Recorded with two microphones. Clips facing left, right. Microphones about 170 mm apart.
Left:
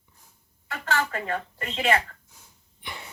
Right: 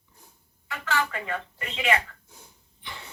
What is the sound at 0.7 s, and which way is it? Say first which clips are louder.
Speech: left 1 dB; 40° left (ahead or behind).